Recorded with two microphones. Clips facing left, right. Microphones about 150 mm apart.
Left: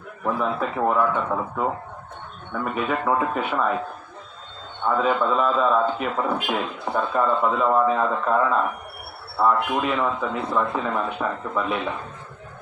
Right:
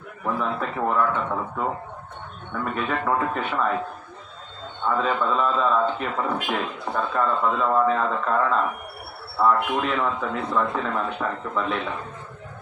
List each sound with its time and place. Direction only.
0.3 s a man's voice: 5° left (ahead or behind)
2.7 s a man's voice: 10° left (ahead or behind)
4.9 s a man's voice: 10° left (ahead or behind)
7.3 s a man's voice: 15° left (ahead or behind)